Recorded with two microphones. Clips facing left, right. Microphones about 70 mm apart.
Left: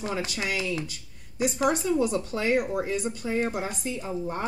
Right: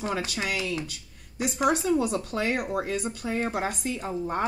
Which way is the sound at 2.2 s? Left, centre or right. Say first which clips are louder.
Left 2 dB; right.